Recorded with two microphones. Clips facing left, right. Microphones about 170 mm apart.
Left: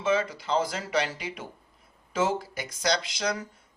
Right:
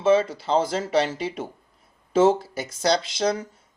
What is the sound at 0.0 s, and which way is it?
Speech, 30° right (ahead or behind).